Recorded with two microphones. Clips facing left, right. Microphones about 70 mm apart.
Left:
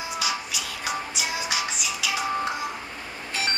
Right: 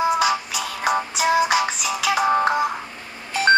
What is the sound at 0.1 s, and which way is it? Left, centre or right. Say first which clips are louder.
Music: right 9 dB; right.